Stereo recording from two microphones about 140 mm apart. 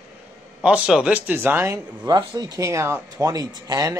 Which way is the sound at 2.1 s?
30° right (ahead or behind).